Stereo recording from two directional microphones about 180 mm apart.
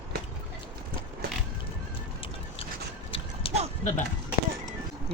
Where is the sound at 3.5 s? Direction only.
30° left (ahead or behind).